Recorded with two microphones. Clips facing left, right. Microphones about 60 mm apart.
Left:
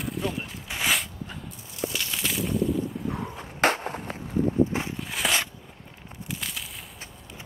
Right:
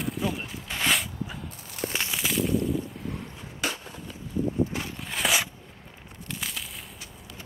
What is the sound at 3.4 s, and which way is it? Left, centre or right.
Skateboard, left.